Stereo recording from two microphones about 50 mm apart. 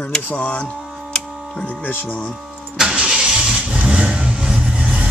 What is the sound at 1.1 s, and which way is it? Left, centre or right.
Tick-tock, centre.